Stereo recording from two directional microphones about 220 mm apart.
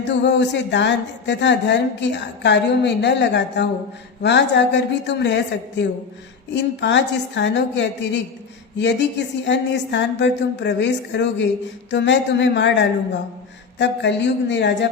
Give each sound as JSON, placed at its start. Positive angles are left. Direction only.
{"t": 0.1, "sound": "speech", "side_deg": 50}
{"t": 6.5, "sound": "speech", "side_deg": 55}